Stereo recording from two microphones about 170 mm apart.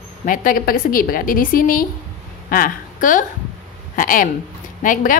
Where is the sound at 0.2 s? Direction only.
55° left (ahead or behind).